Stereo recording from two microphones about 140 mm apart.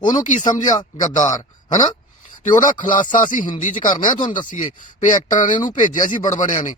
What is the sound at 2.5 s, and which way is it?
Music, 70° left (ahead or behind).